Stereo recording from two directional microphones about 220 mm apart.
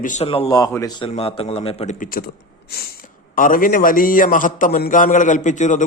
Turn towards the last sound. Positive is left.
turn(degrees=35)  # may be behind; listen again after turning